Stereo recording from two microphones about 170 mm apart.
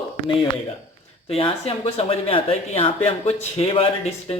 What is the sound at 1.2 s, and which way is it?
Speech, 35° left (ahead or behind).